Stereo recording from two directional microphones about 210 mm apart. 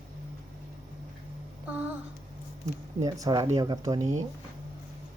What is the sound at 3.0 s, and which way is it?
Speech, 15° right (ahead or behind).